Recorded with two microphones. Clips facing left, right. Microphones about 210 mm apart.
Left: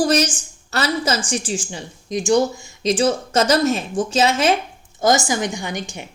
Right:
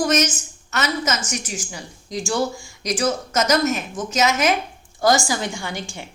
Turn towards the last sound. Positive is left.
turn(degrees=20)  # may be behind; listen again after turning